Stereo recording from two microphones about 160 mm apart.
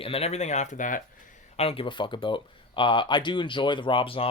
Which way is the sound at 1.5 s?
40° left (ahead or behind).